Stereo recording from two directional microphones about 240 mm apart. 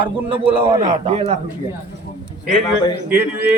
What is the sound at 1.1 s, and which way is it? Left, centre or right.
Speech, right.